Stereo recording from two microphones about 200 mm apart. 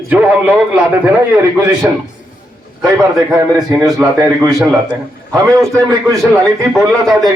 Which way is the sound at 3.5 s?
15° right (ahead or behind).